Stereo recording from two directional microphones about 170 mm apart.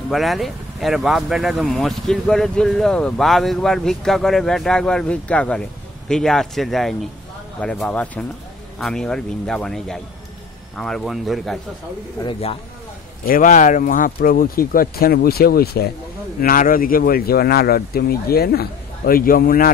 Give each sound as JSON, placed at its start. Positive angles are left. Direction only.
{"t": 0.1, "sound": "speech", "side_deg": 0}
{"t": 13.2, "sound": "speech", "side_deg": 55}
{"t": 16.3, "sound": "speech", "side_deg": 55}